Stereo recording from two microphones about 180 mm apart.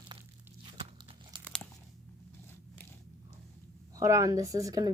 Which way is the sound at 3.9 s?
15° right (ahead or behind).